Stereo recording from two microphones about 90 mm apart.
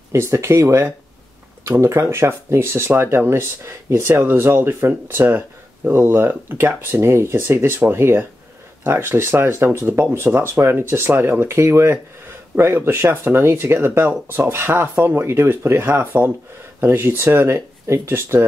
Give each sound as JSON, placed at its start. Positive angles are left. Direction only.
{"t": 0.1, "sound": "speech", "side_deg": -30}